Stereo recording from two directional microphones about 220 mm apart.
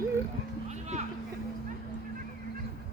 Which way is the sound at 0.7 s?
30° right (ahead or behind).